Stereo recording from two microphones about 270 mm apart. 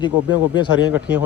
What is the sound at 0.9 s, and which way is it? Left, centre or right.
Speech, centre.